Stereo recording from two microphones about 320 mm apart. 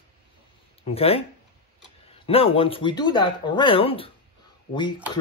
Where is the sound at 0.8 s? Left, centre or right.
Centre.